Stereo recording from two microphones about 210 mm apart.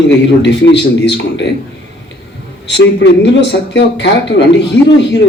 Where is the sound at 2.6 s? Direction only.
55° left (ahead or behind).